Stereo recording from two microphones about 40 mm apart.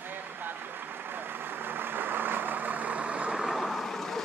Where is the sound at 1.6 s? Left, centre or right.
Right.